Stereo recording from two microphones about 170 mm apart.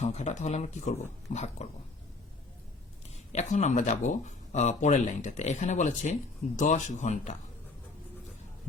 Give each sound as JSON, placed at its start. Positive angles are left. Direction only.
{"t": 0.0, "sound": "speech", "side_deg": 40}
{"t": 3.3, "sound": "speech", "side_deg": 45}